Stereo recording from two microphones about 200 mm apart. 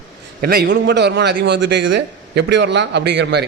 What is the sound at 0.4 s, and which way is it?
A man's voice, 50° right (ahead or behind).